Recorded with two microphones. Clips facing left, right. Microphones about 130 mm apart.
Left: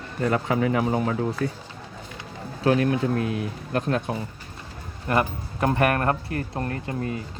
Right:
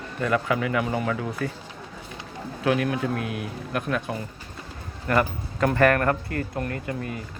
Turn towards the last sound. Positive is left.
turn(degrees=30)  # may be behind; listen again after turning